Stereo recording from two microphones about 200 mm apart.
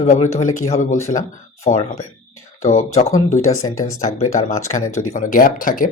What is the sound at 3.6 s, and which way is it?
Speech, 15° left (ahead or behind).